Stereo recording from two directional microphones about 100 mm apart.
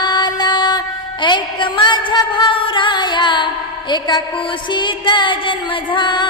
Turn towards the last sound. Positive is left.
turn(degrees=50)  # may be behind; listen again after turning